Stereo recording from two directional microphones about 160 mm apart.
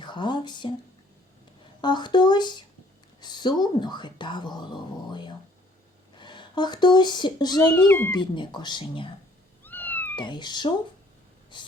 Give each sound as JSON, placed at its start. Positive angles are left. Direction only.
{"t": 0.0, "sound": "speech", "side_deg": 30}
{"t": 1.8, "sound": "speech", "side_deg": 30}
{"t": 3.2, "sound": "a sound", "side_deg": 25}
{"t": 3.6, "sound": "speech", "side_deg": 30}
{"t": 7.9, "sound": "speech", "side_deg": 10}
{"t": 8.1, "sound": "speech", "side_deg": 30}
{"t": 9.6, "sound": "cat", "side_deg": 10}
{"t": 10.2, "sound": "speech", "side_deg": 30}
{"t": 11.5, "sound": "snort", "side_deg": 30}